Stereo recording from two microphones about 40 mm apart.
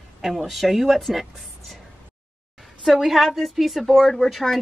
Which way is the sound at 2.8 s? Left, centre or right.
Centre.